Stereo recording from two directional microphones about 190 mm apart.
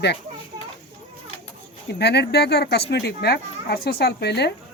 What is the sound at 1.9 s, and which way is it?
Speech, 60° left (ahead or behind).